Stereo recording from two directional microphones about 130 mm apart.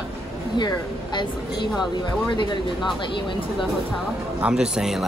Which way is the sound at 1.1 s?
35° left (ahead or behind).